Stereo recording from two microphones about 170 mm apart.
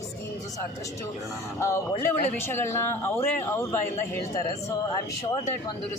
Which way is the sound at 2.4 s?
15° left (ahead or behind).